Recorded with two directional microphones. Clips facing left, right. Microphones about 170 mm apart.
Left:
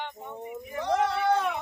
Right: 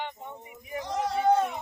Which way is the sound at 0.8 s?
70° left (ahead or behind).